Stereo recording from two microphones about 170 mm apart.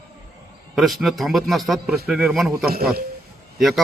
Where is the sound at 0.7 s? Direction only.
Centre (ahead or behind).